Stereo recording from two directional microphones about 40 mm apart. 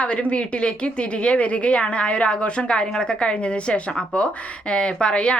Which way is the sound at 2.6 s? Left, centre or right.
Left.